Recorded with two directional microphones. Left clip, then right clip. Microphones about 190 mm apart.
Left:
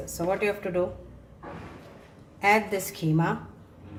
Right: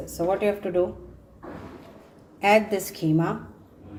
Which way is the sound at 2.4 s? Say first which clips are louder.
Right 3 dB; 25° right (ahead or behind).